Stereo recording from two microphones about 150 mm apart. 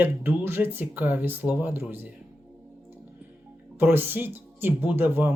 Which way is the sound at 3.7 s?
15° right (ahead or behind).